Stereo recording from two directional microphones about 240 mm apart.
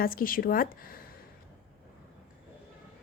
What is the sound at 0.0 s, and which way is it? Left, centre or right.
A woman's voice, left.